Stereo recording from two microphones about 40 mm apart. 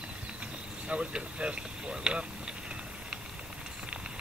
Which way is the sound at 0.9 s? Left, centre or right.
Right.